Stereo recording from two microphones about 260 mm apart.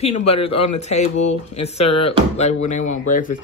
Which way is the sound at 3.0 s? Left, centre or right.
Left.